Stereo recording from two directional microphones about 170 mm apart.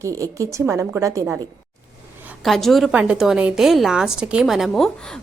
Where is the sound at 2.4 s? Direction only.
Centre (ahead or behind).